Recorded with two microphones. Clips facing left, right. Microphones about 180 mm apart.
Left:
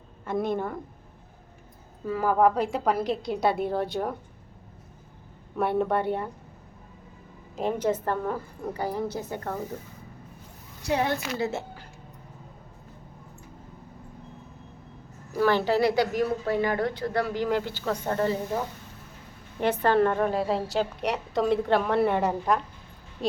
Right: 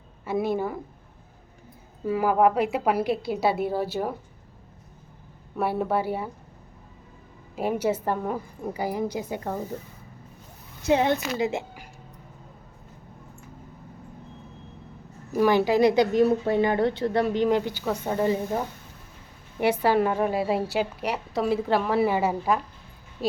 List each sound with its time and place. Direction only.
0.3 s a woman's voice: 5° right (ahead or behind)
2.0 s a woman's voice: 10° right (ahead or behind)
5.5 s a woman's voice: 5° right (ahead or behind)
7.5 s a woman's voice: 10° right (ahead or behind)
10.8 s a woman's voice: 20° right (ahead or behind)
15.3 s a woman's voice: 15° right (ahead or behind)